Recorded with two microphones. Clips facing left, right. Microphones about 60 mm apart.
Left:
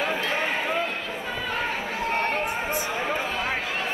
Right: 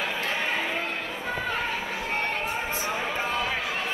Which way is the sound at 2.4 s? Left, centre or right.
Left.